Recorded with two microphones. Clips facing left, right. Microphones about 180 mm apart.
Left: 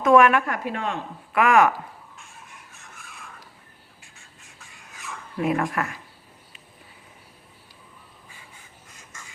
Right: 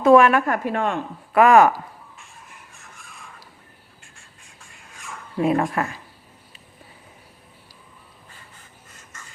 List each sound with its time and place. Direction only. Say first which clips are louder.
0.0 s a woman's voice: right 3 dB; 30° right (ahead or behind); by 0.9 s 50° right (ahead or behind)
1.3 s a woman's voice: right 5 dB; 35° right (ahead or behind)
2.7 s a sound: even; centre (ahead or behind)
4.0 s duck: right 1 dB; centre (ahead or behind)
5.4 s speech: right 4 dB; 30° right (ahead or behind)
9.0 s duck: even; 10° left (ahead or behind)